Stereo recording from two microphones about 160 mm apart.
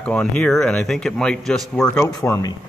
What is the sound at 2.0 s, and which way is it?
Speech, 20° left (ahead or behind).